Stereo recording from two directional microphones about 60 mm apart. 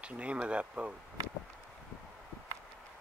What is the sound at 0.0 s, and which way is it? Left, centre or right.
Speech, right.